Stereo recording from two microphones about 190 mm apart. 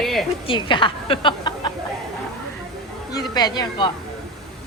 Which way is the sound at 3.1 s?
20° left (ahead or behind).